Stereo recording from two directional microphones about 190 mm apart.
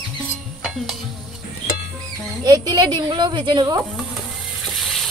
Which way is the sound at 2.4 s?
20° right (ahead or behind).